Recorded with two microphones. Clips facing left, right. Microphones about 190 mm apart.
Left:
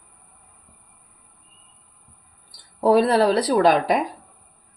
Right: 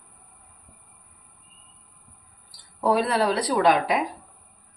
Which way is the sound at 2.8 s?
35° left (ahead or behind).